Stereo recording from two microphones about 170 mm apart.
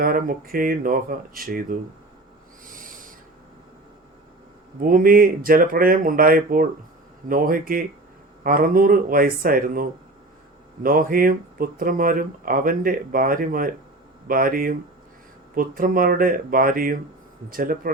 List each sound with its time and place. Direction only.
0.0 s speech: 55° right (ahead or behind)
2.6 s owl: 55° right (ahead or behind)
4.8 s speech: 55° right (ahead or behind)